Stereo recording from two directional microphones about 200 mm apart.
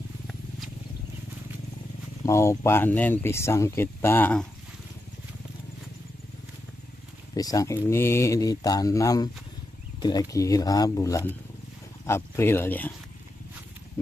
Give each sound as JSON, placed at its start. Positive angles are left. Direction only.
{"t": 2.2, "sound": "speech", "side_deg": 15}
{"t": 7.3, "sound": "speech", "side_deg": 15}